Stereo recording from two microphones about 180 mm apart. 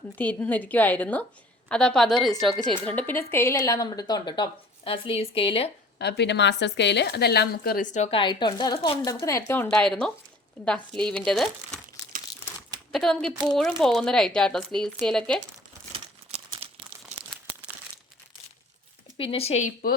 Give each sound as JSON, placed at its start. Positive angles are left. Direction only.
{"t": 0.2, "sound": "a woman's voice", "side_deg": 10}
{"t": 6.0, "sound": "a woman's voice", "side_deg": 70}
{"t": 12.9, "sound": "speech", "side_deg": 0}
{"t": 15.9, "sound": "crumpling", "side_deg": -30}
{"t": 19.1, "sound": "speech", "side_deg": 30}